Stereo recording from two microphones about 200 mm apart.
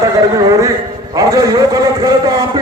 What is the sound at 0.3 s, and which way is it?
A man's voice, 15° right (ahead or behind).